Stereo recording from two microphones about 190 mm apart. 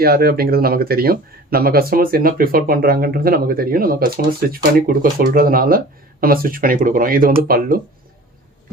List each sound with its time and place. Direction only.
0.0 s speech: 55° right (ahead or behind)